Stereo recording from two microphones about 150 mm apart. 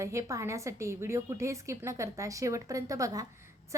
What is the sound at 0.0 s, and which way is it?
Speech, 20° right (ahead or behind).